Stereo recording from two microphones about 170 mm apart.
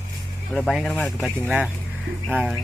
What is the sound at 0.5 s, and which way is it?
Speech, 5° left (ahead or behind).